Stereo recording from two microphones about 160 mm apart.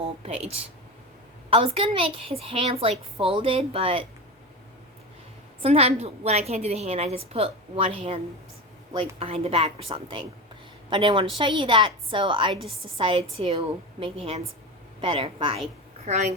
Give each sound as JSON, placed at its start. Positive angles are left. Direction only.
{"t": 0.2, "sound": "a woman's voice", "side_deg": -40}
{"t": 5.6, "sound": "a woman's voice", "side_deg": -40}
{"t": 16.0, "sound": "a woman's voice", "side_deg": -45}